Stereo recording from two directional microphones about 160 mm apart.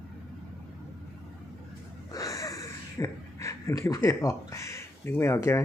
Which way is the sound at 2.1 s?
20° left (ahead or behind).